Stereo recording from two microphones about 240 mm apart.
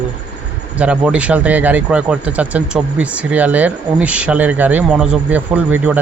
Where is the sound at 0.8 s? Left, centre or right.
Centre.